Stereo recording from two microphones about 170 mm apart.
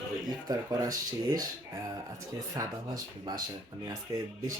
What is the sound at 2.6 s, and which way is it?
Speech, 20° right (ahead or behind).